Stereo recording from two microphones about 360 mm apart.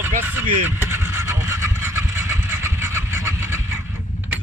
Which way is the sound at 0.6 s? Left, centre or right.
Centre.